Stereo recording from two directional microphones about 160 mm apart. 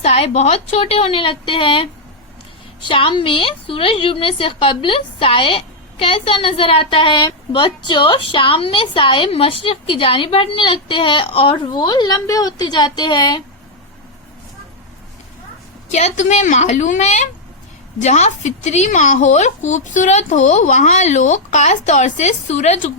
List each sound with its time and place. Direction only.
0.0 s a woman's voice: 40° left (ahead or behind)
15.9 s speech: 45° left (ahead or behind)